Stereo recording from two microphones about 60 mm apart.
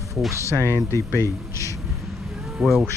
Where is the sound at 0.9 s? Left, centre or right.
Left.